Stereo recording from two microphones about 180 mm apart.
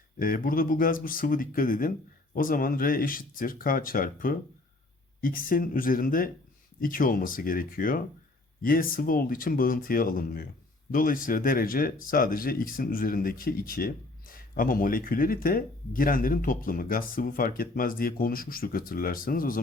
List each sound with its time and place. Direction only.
0.2 s speech: 50° left (ahead or behind)